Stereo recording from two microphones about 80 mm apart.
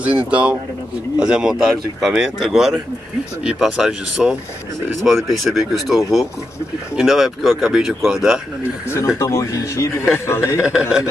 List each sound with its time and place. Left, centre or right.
0.3 s speech: centre
3.7 s speech: centre
5.0 s speech: centre
8.9 s speech: left
10.8 s speech: centre